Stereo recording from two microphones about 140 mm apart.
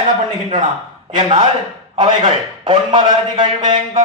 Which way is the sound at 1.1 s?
35° right (ahead or behind).